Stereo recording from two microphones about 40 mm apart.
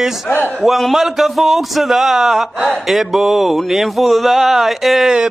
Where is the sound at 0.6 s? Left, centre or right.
Centre.